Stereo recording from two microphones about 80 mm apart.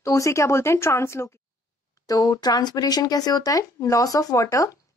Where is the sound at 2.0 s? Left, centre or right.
Left.